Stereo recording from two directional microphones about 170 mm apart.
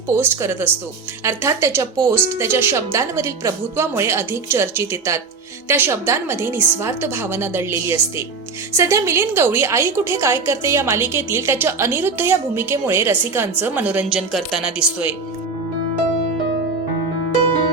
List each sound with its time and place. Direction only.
0.2 s a woman's voice: 15° right (ahead or behind)